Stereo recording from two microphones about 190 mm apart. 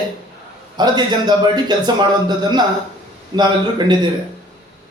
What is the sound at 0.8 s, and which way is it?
A man's voice, 20° right (ahead or behind).